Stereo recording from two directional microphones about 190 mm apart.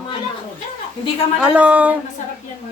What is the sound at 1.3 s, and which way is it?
Speech, 5° right (ahead or behind).